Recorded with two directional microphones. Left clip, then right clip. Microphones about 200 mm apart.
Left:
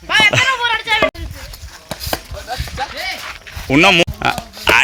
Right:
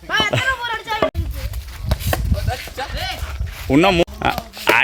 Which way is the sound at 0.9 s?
25° left (ahead or behind).